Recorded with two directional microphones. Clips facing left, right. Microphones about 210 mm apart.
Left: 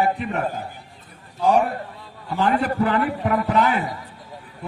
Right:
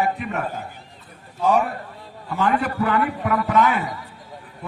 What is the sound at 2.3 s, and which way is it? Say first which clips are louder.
A man's voice: left 1 dB; 35° left (ahead or behind).